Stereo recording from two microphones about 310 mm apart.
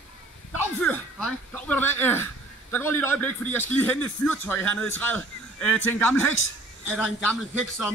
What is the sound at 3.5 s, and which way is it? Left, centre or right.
Speech, centre.